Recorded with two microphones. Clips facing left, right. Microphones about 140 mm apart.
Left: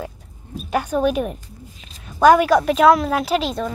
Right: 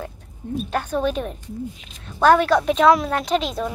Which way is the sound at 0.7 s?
10° left (ahead or behind).